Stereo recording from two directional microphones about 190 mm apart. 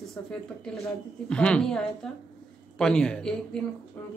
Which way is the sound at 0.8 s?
5° left (ahead or behind).